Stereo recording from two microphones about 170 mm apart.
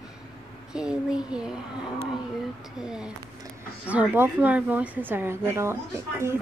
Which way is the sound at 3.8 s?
10° right (ahead or behind).